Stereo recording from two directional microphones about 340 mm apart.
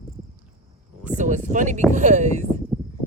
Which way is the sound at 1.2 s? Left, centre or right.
Right.